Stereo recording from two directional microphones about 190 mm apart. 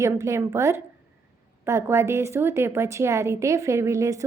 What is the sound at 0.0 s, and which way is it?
A woman's voice, 15° right (ahead or behind).